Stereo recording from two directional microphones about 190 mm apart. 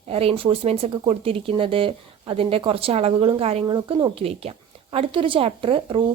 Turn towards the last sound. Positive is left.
turn(degrees=-25)  # may be behind; listen again after turning